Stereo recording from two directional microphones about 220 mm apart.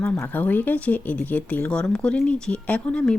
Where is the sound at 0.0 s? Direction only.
5° left (ahead or behind).